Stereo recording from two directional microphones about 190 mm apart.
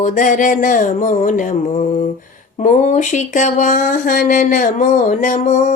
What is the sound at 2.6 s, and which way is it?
Speech, 40° left (ahead or behind).